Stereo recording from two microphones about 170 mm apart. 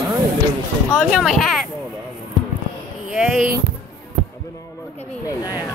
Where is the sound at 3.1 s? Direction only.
5° right (ahead or behind).